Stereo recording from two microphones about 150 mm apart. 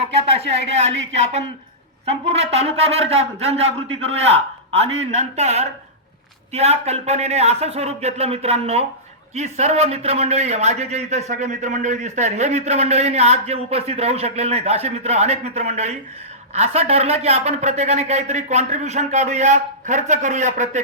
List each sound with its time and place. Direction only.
0.0 s a man's voice: 40° right (ahead or behind)